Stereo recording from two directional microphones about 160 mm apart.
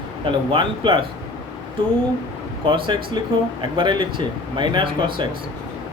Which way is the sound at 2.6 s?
30° right (ahead or behind).